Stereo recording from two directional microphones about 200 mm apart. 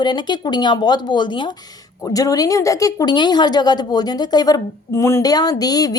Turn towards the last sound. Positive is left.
turn(degrees=20)  # may be behind; listen again after turning